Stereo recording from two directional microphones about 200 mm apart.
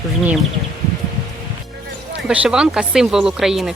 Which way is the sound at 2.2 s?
5° right (ahead or behind).